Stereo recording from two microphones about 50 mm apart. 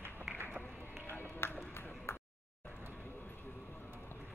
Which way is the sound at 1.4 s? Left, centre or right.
Left.